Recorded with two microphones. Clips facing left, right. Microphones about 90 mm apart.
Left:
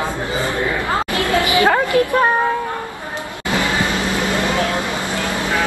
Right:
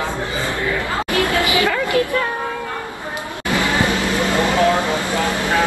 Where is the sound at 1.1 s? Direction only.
20° left (ahead or behind).